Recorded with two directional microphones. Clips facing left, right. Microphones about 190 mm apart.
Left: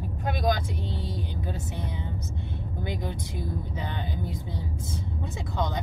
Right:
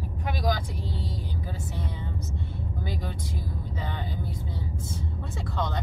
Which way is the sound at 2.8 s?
20° left (ahead or behind).